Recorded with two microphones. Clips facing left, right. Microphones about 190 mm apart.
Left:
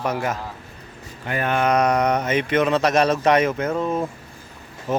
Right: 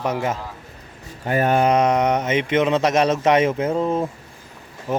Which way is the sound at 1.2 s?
40° right (ahead or behind).